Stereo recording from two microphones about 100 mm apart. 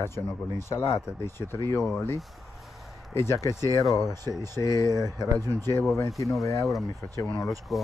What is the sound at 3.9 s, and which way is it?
Speech, 40° right (ahead or behind).